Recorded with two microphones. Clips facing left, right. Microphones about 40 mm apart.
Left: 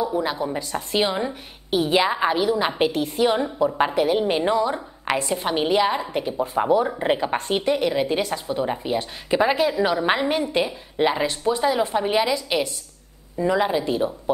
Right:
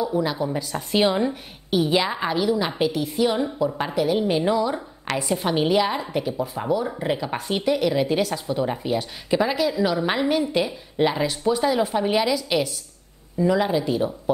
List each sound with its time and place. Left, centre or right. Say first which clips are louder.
0.0 s a woman's voice: even; centre